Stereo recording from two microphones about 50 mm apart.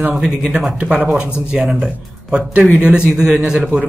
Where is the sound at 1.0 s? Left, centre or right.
Right.